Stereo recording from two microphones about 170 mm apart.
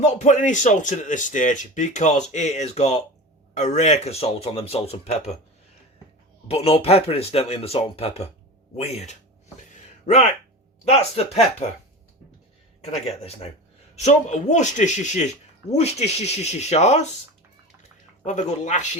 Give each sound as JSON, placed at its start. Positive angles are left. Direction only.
{"t": 0.0, "sound": "speech", "side_deg": 45}
{"t": 6.5, "sound": "speech", "side_deg": 35}
{"t": 10.8, "sound": "speech", "side_deg": 40}
{"t": 13.9, "sound": "speech", "side_deg": 40}
{"t": 18.3, "sound": "speech", "side_deg": 45}